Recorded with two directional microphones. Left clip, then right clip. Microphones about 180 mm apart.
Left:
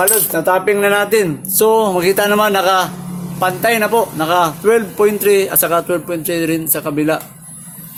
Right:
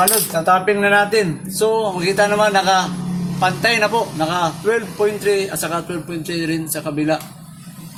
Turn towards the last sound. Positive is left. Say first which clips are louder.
# left 3 dB
turn(degrees=55)  # may be behind; listen again after turning